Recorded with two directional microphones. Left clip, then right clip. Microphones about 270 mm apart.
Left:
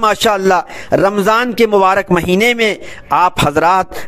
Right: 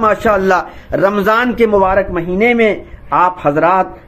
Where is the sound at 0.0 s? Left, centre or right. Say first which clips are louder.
Even; left.